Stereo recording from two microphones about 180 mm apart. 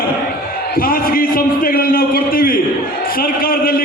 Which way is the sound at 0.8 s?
55° left (ahead or behind).